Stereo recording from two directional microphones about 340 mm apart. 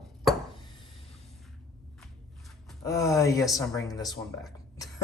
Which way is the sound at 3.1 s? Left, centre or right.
Centre.